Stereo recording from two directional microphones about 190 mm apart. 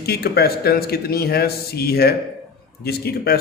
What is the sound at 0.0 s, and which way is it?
A man's voice, 55° left (ahead or behind).